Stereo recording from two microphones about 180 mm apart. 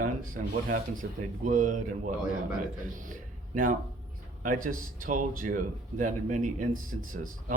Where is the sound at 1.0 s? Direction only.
60° right (ahead or behind).